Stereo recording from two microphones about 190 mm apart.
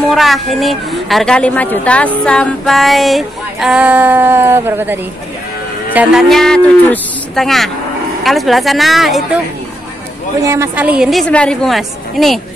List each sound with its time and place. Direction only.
0.1 s a woman's voice: centre (ahead or behind)
2.2 s female singing: 5° left (ahead or behind); by 5.0 s 10° right (ahead or behind)
5.9 s a woman's voice: centre (ahead or behind)
10.4 s a woman's voice: 15° right (ahead or behind); by 12.4 s centre (ahead or behind)